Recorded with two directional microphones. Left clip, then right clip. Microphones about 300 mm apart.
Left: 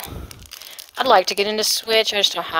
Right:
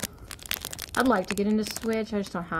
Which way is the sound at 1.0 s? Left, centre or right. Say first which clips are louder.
Left 12 dB; left.